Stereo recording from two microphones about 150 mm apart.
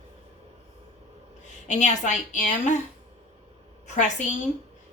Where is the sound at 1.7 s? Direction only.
50° left (ahead or behind).